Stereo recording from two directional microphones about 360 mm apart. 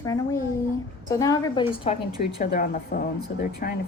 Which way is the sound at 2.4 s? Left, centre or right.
Left.